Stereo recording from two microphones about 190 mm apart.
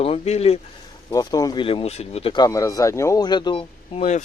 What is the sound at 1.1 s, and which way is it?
Speech, 20° left (ahead or behind).